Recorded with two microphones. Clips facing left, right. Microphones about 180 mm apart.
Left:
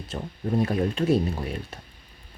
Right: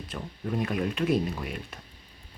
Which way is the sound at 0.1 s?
30° left (ahead or behind).